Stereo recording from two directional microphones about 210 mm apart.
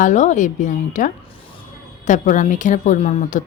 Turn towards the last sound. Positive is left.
turn(degrees=30)  # may be behind; listen again after turning